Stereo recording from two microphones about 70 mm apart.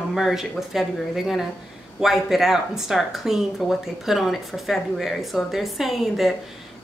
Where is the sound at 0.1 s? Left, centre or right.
Centre.